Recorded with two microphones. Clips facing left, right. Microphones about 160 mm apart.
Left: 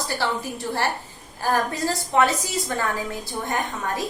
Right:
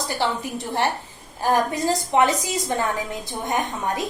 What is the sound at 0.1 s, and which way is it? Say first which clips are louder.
A woman's voice: right 2 dB; 20° right (ahead or behind).